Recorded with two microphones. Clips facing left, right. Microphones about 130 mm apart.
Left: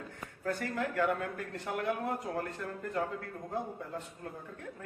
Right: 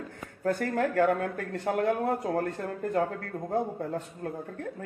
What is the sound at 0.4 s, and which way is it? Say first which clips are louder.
Speech: right 7 dB; 50° right (ahead or behind).